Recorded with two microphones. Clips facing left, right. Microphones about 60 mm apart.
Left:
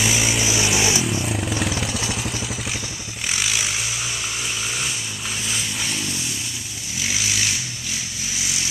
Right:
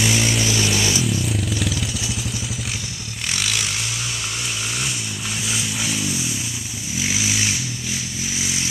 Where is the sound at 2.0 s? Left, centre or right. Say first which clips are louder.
Left 2 dB; left.